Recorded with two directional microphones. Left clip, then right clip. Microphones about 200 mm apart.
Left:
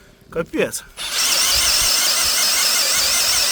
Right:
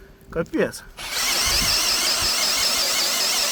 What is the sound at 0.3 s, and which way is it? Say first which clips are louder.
Speech: left 2 dB; 75° left (ahead or behind).